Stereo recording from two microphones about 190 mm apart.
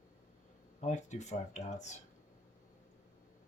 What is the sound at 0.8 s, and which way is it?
Speech, 40° left (ahead or behind).